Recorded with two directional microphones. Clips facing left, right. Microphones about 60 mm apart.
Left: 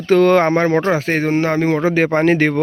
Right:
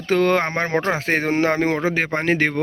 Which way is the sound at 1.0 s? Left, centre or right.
Right.